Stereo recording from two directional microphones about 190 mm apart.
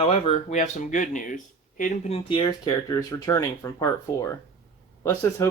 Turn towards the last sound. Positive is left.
turn(degrees=15)  # may be behind; listen again after turning